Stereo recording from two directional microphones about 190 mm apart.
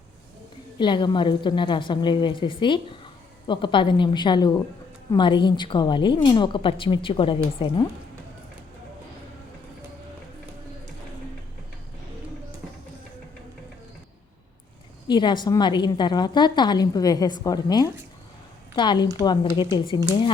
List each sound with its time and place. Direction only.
0.8 s a woman's voice: 25° left (ahead or behind)
15.0 s a woman's voice: 25° left (ahead or behind)